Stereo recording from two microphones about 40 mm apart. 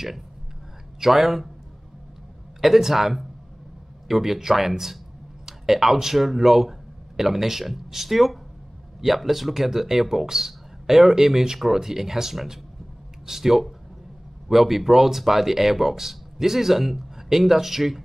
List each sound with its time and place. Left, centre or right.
1.0 s speech: centre
2.6 s speech: centre